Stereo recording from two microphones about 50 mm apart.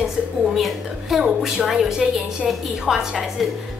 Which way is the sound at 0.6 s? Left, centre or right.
Centre.